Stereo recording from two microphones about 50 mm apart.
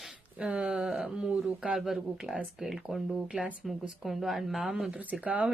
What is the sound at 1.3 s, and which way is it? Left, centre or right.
Speech, right.